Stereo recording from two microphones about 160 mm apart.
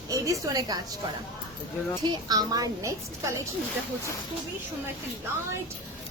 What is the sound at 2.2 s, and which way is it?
A woman's voice, 25° right (ahead or behind).